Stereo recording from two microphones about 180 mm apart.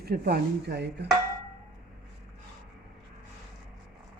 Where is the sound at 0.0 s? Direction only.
60° right (ahead or behind).